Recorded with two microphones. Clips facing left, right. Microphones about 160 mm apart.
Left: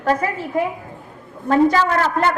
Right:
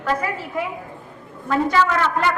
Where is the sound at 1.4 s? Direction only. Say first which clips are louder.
Left 4 dB; 40° left (ahead or behind).